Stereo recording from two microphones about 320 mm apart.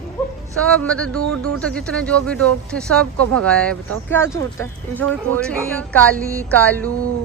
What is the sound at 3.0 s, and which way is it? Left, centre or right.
Speech, right.